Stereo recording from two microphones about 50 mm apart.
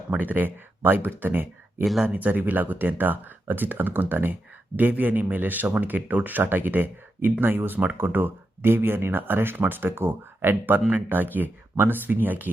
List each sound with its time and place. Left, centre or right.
0.1 s speech: right
1.8 s speech: centre
2.0 s speech: right
10.5 s speech: right